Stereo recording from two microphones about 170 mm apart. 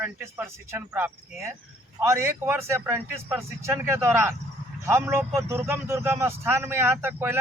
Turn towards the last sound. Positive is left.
turn(degrees=-15)  # may be behind; listen again after turning